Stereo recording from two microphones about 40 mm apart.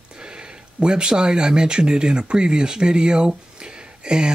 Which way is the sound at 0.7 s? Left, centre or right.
Right.